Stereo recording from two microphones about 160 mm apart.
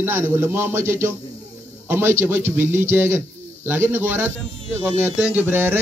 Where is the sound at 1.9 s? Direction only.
15° right (ahead or behind).